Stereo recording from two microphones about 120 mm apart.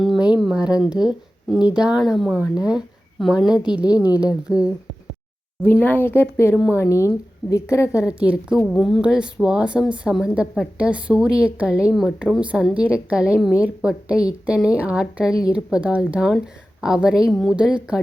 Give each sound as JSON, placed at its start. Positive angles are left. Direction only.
{"t": 0.0, "sound": "a woman's voice", "side_deg": -5}
{"t": 5.6, "sound": "speech", "side_deg": 15}
{"t": 8.3, "sound": "a woman's voice", "side_deg": -5}